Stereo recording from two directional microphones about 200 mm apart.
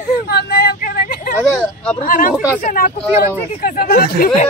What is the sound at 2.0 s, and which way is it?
Speech, 45° left (ahead or behind).